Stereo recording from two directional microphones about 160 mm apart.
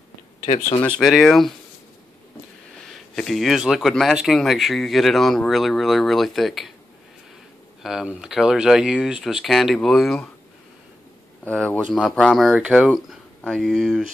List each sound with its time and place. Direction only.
0.5 s speech: 50° left (ahead or behind)
0.8 s speech: 5° left (ahead or behind)
2.8 s speech: 5° left (ahead or behind)
7.8 s speech: 5° right (ahead or behind)
11.4 s speech: 10° left (ahead or behind)